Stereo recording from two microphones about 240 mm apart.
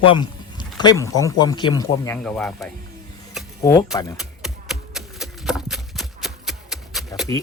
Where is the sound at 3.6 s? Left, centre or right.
Centre.